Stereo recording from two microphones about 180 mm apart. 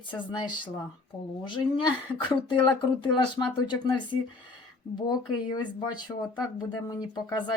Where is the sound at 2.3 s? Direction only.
25° left (ahead or behind).